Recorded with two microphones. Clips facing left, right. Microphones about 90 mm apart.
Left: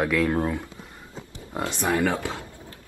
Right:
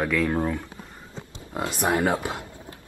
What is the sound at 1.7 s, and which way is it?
Speech, 20° right (ahead or behind).